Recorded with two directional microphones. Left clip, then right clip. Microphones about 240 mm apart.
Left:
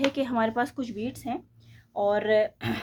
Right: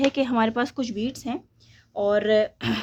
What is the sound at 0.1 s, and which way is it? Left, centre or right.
A woman's voice, right.